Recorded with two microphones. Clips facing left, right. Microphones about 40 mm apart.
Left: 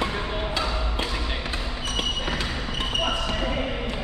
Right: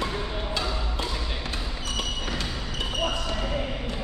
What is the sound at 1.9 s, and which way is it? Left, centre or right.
Basketball bounce, left.